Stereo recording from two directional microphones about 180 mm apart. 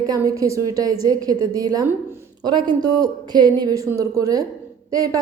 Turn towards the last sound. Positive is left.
turn(degrees=-20)  # may be behind; listen again after turning